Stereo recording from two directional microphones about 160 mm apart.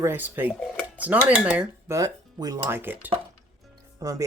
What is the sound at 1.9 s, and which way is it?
Speech, 20° right (ahead or behind).